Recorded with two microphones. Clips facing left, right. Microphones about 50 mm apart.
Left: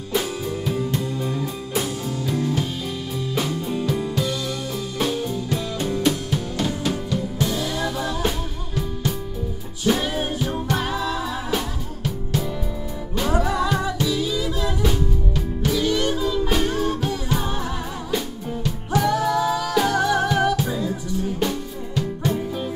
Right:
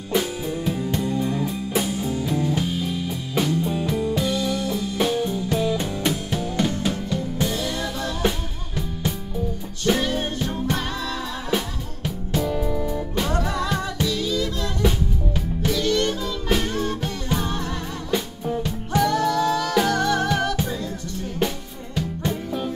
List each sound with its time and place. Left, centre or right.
0.1 s music: centre
5.6 s music: centre
7.4 s music: centre
13.3 s music: centre
15.7 s music: centre
18.1 s music: centre
18.9 s music: centre
21.9 s music: centre